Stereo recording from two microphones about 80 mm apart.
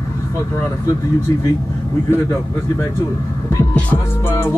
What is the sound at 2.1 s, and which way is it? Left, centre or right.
Speech, left.